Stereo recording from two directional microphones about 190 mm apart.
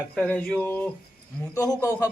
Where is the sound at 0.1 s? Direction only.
5° left (ahead or behind).